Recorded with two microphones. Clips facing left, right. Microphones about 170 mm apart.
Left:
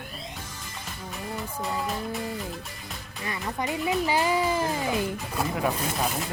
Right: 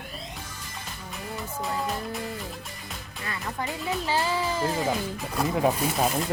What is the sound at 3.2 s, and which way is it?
A child's voice, 20° left (ahead or behind).